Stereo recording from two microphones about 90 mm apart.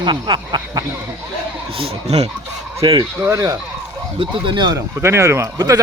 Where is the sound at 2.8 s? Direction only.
70° right (ahead or behind).